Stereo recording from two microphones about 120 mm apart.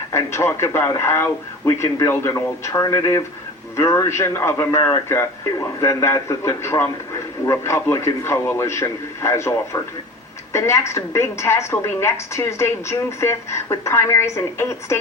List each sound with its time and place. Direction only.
0.1 s a man's voice: 25° left (ahead or behind)